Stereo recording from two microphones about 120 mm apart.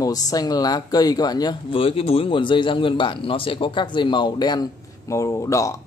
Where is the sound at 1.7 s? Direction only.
50° left (ahead or behind).